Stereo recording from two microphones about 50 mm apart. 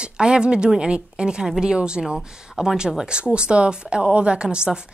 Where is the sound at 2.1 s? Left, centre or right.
Centre.